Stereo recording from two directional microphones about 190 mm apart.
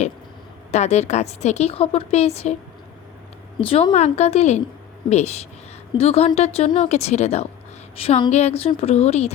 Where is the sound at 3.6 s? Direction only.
30° left (ahead or behind).